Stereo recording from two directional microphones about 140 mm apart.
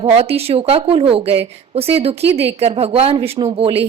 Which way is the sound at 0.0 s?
45° right (ahead or behind).